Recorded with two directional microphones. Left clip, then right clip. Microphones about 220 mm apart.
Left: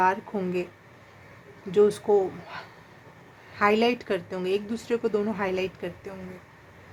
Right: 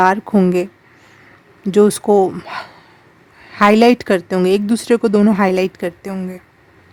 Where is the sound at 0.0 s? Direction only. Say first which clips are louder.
Right 11 dB; 55° right (ahead or behind).